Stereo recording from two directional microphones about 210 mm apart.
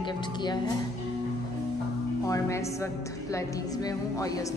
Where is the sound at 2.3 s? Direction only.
15° left (ahead or behind).